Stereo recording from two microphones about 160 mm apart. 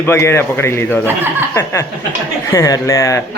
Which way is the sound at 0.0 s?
15° left (ahead or behind).